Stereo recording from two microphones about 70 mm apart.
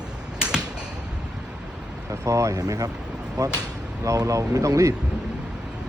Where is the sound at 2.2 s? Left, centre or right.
Right.